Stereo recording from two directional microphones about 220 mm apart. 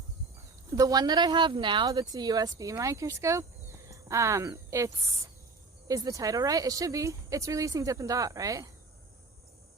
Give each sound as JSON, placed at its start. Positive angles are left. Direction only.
{"t": 0.7, "sound": "speech", "side_deg": -15}